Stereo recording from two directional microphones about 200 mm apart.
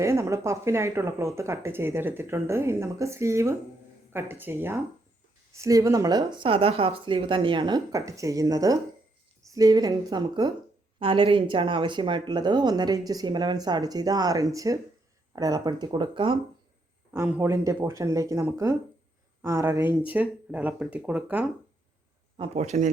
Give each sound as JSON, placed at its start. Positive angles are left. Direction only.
{"t": 0.0, "sound": "speech", "side_deg": -15}
{"t": 17.1, "sound": "speech", "side_deg": -10}
{"t": 22.4, "sound": "speech", "side_deg": -35}